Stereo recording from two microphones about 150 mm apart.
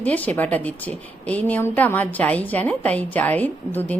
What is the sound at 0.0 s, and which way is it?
A woman's voice, 10° left (ahead or behind).